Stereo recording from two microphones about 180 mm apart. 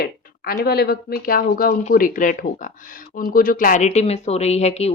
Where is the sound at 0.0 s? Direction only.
55° left (ahead or behind).